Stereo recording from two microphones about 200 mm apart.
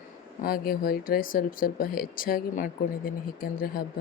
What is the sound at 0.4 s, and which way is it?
A woman's voice, 45° left (ahead or behind).